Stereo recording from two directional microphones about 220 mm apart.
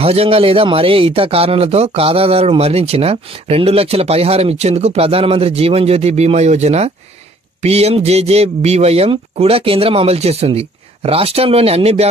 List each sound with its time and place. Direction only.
0.0 s speech: 25° right (ahead or behind)